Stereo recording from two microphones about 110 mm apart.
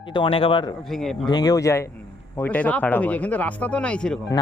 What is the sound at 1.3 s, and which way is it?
Speech, 35° left (ahead or behind).